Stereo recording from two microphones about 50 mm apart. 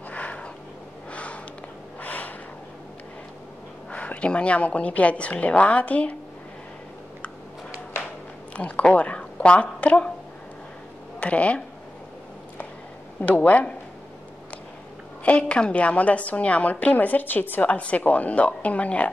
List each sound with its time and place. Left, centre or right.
0.1 s a sound: left
1.1 s sniff: left
2.0 s a sound: left
3.9 s a woman's voice: left
8.5 s speech: left
11.1 s speech: left
13.2 s a woman's voice: left
15.2 s a woman's voice: left
17.6 s a woman's voice: left